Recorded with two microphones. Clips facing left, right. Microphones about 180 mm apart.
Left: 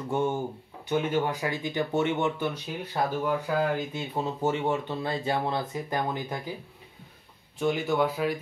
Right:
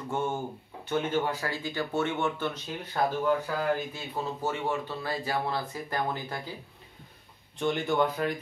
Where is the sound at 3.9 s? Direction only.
20° left (ahead or behind).